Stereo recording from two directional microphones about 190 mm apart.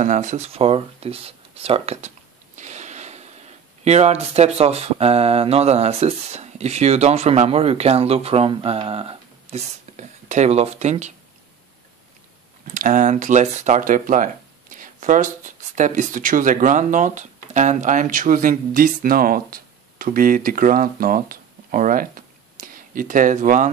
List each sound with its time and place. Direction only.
0.0 s a sound: 40° right (ahead or behind)
3.8 s speech: 35° right (ahead or behind)
12.7 s speech: 45° right (ahead or behind)